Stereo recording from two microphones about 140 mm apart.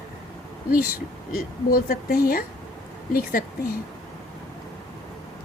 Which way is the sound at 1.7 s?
90° left.